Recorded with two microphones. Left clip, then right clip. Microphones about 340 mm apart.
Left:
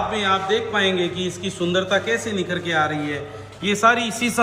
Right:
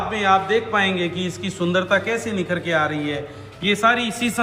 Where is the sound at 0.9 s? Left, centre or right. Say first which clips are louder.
Left 1 dB; right.